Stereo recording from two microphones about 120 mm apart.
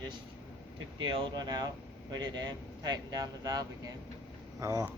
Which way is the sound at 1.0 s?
40° right (ahead or behind).